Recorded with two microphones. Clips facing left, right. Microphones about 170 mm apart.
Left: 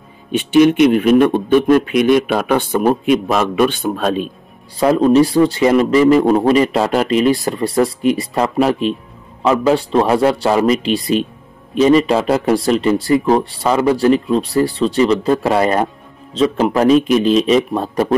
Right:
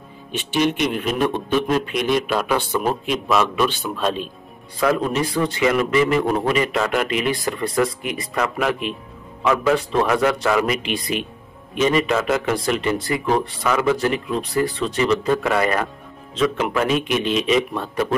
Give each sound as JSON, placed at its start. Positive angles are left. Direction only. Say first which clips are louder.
{"t": 0.3, "sound": "speech", "louder": "left 10 dB", "side_deg": 55}
{"t": 4.7, "sound": "speech", "louder": "left 9 dB", "side_deg": 35}